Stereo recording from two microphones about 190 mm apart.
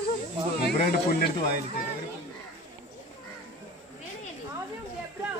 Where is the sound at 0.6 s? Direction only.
55° left (ahead or behind).